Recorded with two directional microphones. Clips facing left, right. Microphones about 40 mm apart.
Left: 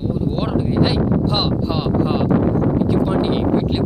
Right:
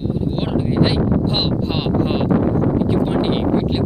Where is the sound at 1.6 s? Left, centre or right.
Right.